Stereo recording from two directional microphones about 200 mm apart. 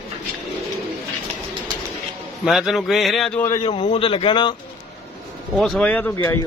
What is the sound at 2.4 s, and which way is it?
A man's voice, centre (ahead or behind).